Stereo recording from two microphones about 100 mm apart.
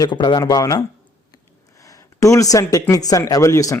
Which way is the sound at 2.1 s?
30° left (ahead or behind).